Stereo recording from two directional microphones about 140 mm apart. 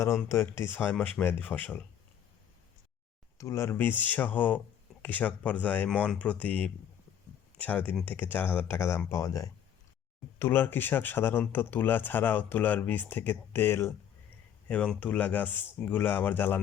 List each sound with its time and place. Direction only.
0.0 s speech: 20° left (ahead or behind)
3.3 s speech: 20° left (ahead or behind)